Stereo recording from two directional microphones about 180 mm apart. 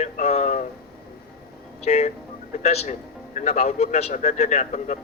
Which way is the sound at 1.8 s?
35° left (ahead or behind).